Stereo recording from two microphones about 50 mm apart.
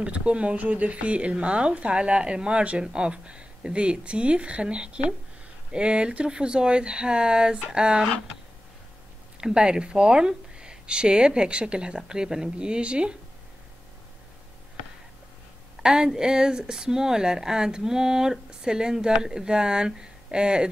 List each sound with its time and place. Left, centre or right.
0.0 s speech: right
9.4 s speech: centre
15.8 s speech: centre